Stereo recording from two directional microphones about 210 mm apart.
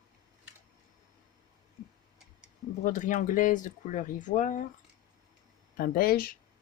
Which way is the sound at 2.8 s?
35° left (ahead or behind).